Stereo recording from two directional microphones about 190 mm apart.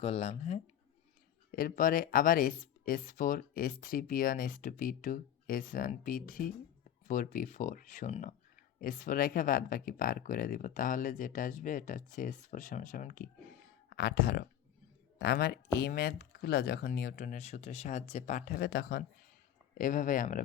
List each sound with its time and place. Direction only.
0.0 s speech: 30° left (ahead or behind)
1.5 s speech: 50° left (ahead or behind)
19.8 s speech: 40° left (ahead or behind)